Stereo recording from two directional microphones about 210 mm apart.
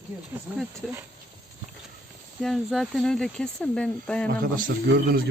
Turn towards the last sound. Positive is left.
turn(degrees=-45)  # may be behind; listen again after turning